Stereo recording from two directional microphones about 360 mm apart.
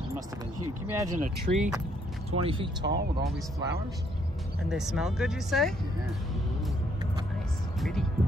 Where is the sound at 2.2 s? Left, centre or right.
Centre.